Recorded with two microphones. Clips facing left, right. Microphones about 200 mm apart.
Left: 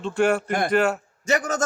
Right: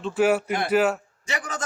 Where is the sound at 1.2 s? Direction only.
45° left (ahead or behind).